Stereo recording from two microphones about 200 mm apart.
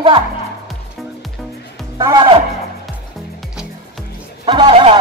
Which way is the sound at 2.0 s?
25° right (ahead or behind).